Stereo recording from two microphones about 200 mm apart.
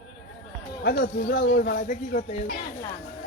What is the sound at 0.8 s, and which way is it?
Speech, 45° left (ahead or behind).